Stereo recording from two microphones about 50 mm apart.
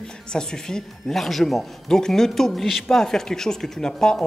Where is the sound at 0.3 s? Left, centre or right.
Centre.